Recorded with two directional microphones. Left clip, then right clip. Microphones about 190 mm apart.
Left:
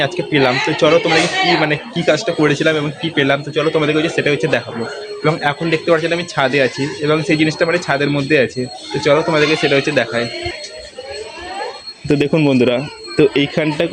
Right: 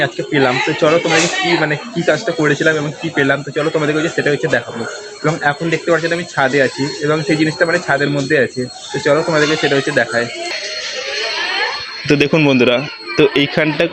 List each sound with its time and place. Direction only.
0.0 s speech: 5° left (ahead or behind)
12.0 s speech: 15° left (ahead or behind)